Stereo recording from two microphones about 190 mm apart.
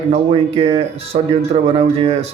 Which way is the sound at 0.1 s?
30° right (ahead or behind).